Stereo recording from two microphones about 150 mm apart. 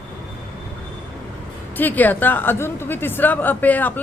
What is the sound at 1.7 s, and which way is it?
A woman's voice, 10° left (ahead or behind).